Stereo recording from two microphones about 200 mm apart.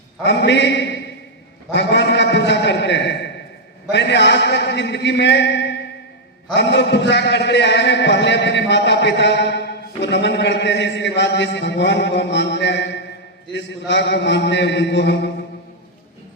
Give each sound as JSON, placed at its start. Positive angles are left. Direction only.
{"t": 0.2, "sound": "a man's voice", "side_deg": 60}